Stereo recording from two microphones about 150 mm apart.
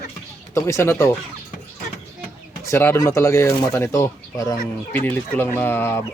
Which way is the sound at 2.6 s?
15° left (ahead or behind).